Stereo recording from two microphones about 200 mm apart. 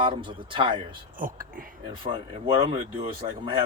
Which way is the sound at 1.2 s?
45° right (ahead or behind).